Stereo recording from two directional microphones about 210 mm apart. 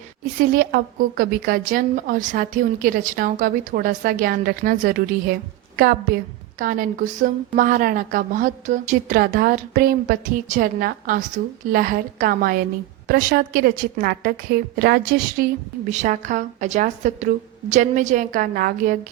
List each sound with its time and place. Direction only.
0.5 s a woman's voice: 45° right (ahead or behind)
15.9 s a woman's voice: 35° right (ahead or behind)